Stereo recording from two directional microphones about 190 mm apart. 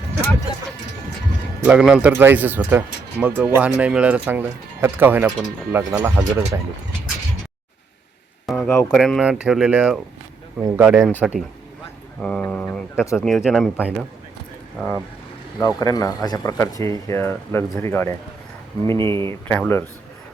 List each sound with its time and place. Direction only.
1.6 s speech: 5° right (ahead or behind)
8.4 s speech: 5° left (ahead or behind); by 10.9 s 10° right (ahead or behind)
10.9 s speech: centre (ahead or behind)
13.2 s speech: centre (ahead or behind)
15.6 s speech: 20° left (ahead or behind)
18.9 s speech: 25° right (ahead or behind)
19.3 s speech: 10° left (ahead or behind)